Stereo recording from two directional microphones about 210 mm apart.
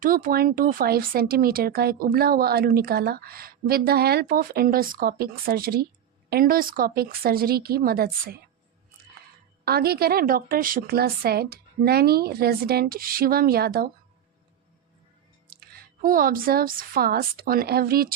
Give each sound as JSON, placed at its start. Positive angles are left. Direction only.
{"t": 0.0, "sound": "speech", "side_deg": -40}
{"t": 9.6, "sound": "speech", "side_deg": -45}
{"t": 15.4, "sound": "speech", "side_deg": -45}